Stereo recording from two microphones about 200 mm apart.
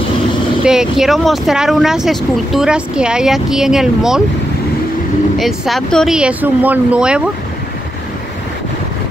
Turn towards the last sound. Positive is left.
turn(degrees=-5)  # may be behind; listen again after turning